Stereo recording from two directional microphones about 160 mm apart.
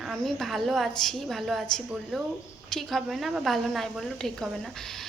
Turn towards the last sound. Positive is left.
turn(degrees=0)  # may be behind; listen again after turning